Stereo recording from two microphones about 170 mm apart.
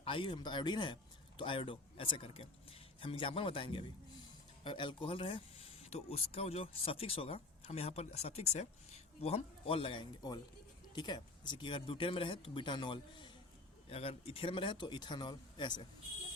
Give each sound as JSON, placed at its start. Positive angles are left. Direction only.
{"t": 0.0, "sound": "speech", "side_deg": 30}